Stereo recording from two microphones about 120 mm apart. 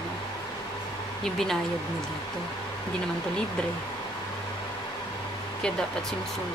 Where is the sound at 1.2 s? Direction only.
5° left (ahead or behind).